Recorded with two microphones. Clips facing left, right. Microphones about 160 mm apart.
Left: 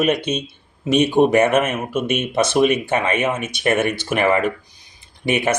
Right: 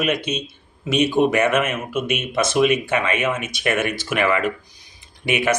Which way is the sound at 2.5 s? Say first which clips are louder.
Even; 40° left (ahead or behind).